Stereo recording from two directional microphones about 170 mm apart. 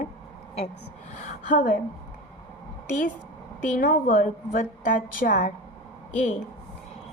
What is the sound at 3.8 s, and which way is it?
A woman's voice, 50° left (ahead or behind).